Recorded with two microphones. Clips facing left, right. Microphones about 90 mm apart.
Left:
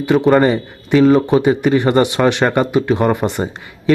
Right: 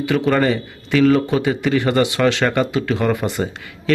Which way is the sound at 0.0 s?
20° left (ahead or behind).